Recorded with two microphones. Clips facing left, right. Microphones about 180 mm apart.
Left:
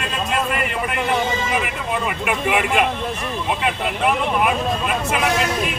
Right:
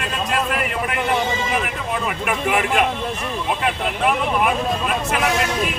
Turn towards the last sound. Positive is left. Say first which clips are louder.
# even
turn(degrees=0)  # may be behind; listen again after turning